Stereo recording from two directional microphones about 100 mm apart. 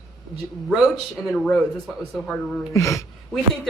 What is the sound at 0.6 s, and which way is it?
Speech, centre (ahead or behind).